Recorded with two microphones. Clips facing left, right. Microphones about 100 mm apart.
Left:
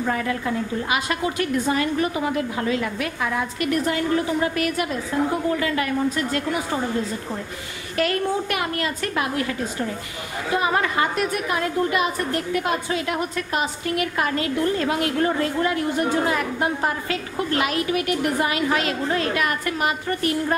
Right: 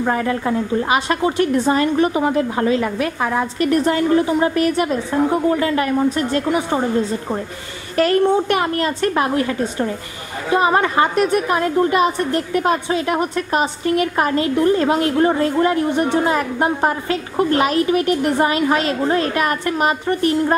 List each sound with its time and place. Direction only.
0.0 s a woman's voice: 40° right (ahead or behind)
7.9 s a woman's voice: 35° right (ahead or behind)